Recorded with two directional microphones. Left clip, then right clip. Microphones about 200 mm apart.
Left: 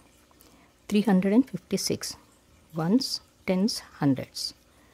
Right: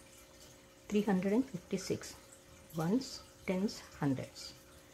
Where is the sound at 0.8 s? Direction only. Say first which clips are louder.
Left 8 dB; 65° left (ahead or behind).